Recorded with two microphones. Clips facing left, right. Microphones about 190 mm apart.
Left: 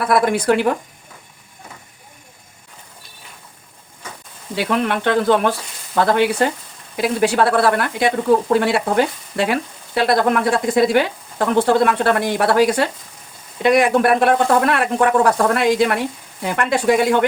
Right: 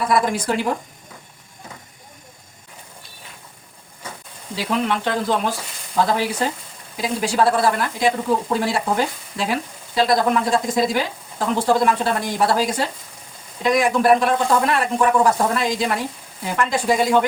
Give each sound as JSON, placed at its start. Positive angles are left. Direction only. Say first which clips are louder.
{"t": 0.0, "sound": "speech", "louder": "left 3 dB", "side_deg": 60}
{"t": 4.5, "sound": "speech", "louder": "left 3 dB", "side_deg": 60}